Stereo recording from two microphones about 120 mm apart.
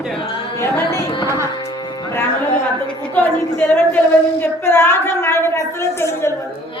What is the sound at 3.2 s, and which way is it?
Speech, 15° left (ahead or behind).